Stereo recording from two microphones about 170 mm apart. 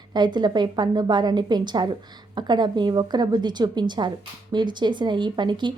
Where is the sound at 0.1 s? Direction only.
25° right (ahead or behind).